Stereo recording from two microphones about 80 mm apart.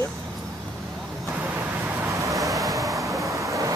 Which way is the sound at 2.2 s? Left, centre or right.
Right.